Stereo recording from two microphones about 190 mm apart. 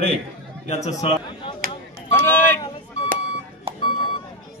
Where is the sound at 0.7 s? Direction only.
35° left (ahead or behind).